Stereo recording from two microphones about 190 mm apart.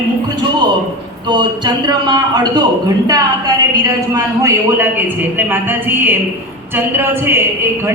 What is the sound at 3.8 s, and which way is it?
A man's voice, 15° right (ahead or behind).